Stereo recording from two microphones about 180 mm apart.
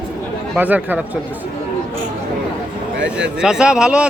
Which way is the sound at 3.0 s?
5° right (ahead or behind).